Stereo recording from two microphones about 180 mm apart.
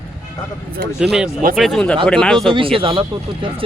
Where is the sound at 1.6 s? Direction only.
Centre (ahead or behind).